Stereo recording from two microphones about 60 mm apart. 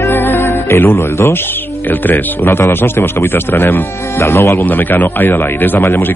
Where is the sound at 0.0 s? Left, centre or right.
Left.